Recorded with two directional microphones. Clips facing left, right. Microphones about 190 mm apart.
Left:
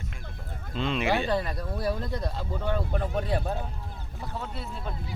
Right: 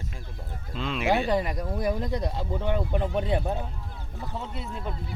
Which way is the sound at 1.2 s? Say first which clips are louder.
Right 2 dB; 15° right (ahead or behind).